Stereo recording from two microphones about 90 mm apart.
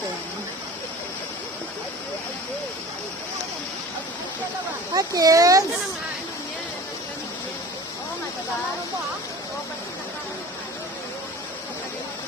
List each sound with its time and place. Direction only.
4.9 s speech: 40° right (ahead or behind)